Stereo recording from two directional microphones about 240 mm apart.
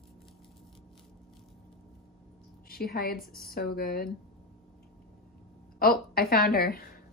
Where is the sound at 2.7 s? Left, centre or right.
Left.